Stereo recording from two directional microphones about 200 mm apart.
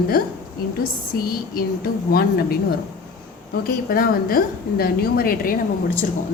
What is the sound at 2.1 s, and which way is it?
Speech, 50° left (ahead or behind).